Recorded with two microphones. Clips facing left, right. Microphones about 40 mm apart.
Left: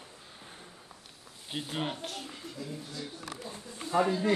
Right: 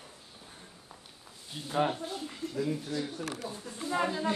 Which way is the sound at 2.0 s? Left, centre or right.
Left.